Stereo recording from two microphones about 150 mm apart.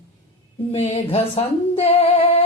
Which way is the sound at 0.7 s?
45° left (ahead or behind).